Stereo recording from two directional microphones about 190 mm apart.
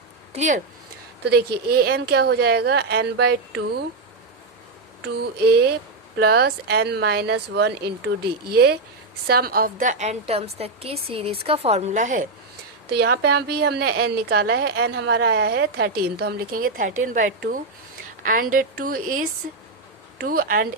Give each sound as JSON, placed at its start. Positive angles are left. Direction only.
{"t": 0.3, "sound": "a woman's voice", "side_deg": -40}
{"t": 1.2, "sound": "a woman's voice", "side_deg": -60}
{"t": 5.0, "sound": "a woman's voice", "side_deg": -60}
{"t": 12.9, "sound": "a woman's voice", "side_deg": -60}
{"t": 20.2, "sound": "a woman's voice", "side_deg": -50}